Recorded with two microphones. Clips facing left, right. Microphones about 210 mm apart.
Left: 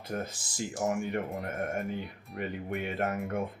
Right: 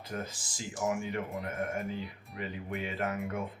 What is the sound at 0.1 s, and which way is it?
Speech, 45° left (ahead or behind).